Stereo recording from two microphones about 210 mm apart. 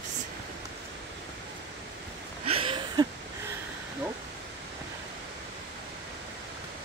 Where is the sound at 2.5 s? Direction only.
25° right (ahead or behind).